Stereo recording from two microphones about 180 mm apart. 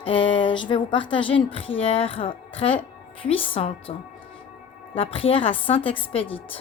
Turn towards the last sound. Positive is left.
turn(degrees=30)  # may be behind; listen again after turning